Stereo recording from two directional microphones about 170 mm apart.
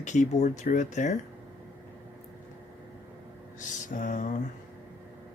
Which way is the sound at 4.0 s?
50° left (ahead or behind).